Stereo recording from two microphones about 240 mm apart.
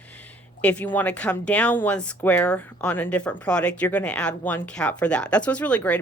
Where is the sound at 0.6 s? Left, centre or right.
Centre.